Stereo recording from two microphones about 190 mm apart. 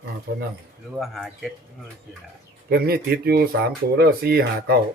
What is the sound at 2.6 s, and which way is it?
Speech, 55° right (ahead or behind).